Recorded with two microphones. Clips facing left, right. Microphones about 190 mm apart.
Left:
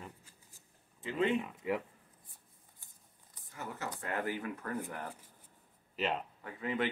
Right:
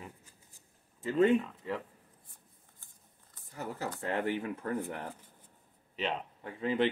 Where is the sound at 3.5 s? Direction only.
35° right (ahead or behind).